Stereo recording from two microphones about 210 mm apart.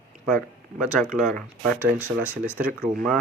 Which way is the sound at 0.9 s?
Centre (ahead or behind).